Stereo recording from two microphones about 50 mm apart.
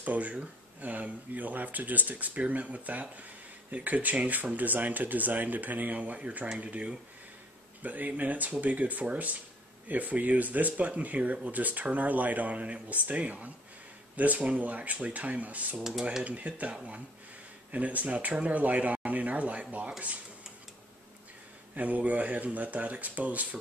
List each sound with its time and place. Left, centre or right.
0.0 s speech: right
15.8 s speech: centre
16.3 s speech: right
21.7 s speech: right